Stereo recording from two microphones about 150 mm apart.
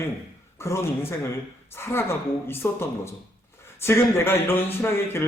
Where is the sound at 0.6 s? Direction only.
20° left (ahead or behind).